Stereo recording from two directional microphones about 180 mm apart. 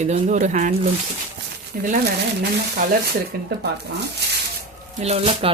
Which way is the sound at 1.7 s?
45° right (ahead or behind).